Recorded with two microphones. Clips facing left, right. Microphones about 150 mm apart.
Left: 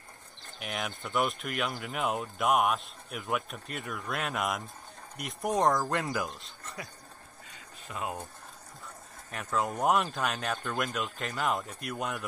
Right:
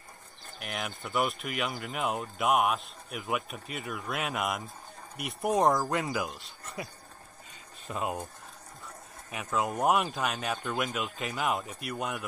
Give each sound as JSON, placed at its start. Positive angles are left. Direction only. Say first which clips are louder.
{"t": 0.6, "sound": "speech", "louder": "left 1 dB", "side_deg": 0}
{"t": 7.9, "sound": "speech", "louder": "right 3 dB", "side_deg": -20}
{"t": 9.3, "sound": "speech", "louder": "right 1 dB", "side_deg": -5}